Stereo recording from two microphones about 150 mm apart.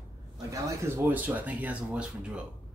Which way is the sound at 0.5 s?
20° right (ahead or behind).